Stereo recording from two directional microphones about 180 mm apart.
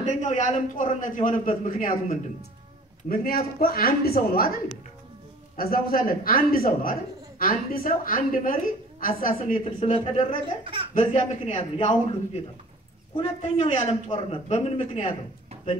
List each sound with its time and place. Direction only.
0.0 s speech: 40° left (ahead or behind)
5.6 s speech: 55° left (ahead or behind)
10.6 s speech: 30° right (ahead or behind)
11.0 s a man's voice: 35° left (ahead or behind)
13.1 s a man's voice: 35° left (ahead or behind)